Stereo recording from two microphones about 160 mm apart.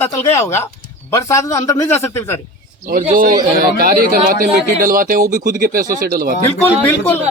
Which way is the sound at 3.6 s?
65° right (ahead or behind).